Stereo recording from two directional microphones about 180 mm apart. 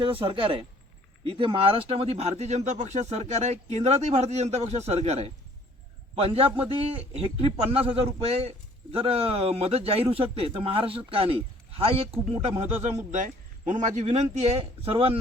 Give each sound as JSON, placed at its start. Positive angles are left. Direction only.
{"t": 0.0, "sound": "a man's voice", "side_deg": -30}